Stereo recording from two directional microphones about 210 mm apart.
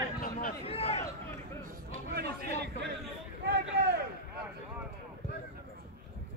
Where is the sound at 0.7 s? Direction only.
30° left (ahead or behind).